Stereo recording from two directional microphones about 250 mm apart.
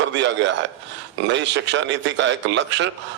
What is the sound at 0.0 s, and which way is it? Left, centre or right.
A man's voice, right.